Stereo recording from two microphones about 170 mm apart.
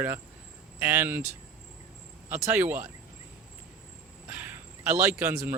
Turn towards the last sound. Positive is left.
turn(degrees=-15)  # may be behind; listen again after turning